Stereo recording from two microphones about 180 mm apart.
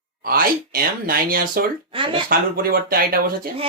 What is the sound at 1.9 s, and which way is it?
Speech, 30° right (ahead or behind).